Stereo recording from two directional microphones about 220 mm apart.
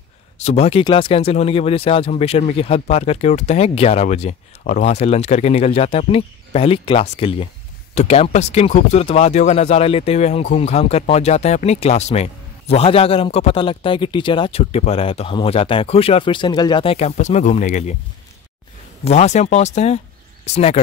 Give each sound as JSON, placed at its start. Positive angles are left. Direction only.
{"t": 0.4, "sound": "speech", "side_deg": 30}
{"t": 19.0, "sound": "speech", "side_deg": 30}